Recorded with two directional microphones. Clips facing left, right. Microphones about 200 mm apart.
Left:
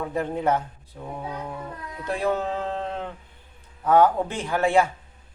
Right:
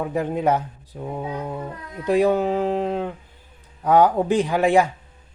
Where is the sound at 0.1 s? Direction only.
10° right (ahead or behind).